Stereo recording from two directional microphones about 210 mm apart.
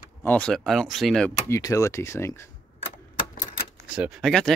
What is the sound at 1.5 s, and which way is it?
Speech, 15° left (ahead or behind).